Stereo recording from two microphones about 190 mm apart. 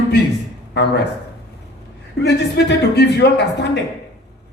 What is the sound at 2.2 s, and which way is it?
A man's voice, 60° left (ahead or behind).